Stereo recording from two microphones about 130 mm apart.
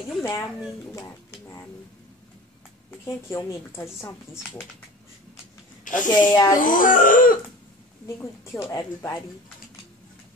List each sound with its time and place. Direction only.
0.2 s a woman's voice: 20° left (ahead or behind)
0.9 s a sound: 25° left (ahead or behind)
2.9 s a woman's voice: 15° left (ahead or behind)
6.0 s speech: 30° left (ahead or behind)
6.5 s a sound: 90° left
8.2 s a woman's voice: 20° left (ahead or behind)